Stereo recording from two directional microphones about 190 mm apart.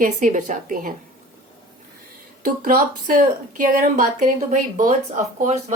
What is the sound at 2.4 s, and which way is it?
Speech, 45° right (ahead or behind).